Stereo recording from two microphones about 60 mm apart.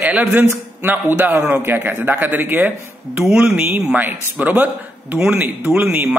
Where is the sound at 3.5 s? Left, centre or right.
Right.